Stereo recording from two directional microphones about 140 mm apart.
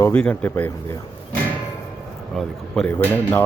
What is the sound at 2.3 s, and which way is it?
Speech, 5° left (ahead or behind).